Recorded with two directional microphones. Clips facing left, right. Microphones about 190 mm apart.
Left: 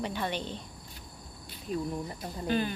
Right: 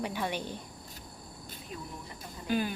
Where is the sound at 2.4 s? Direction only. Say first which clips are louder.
Left 1 dB; 10° right (ahead or behind).